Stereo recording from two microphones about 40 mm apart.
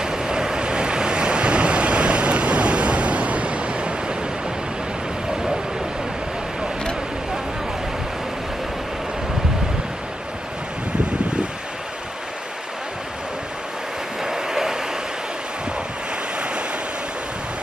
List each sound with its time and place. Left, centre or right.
0.0 s waves: centre
14.2 s vehicle: centre
16.3 s waves: right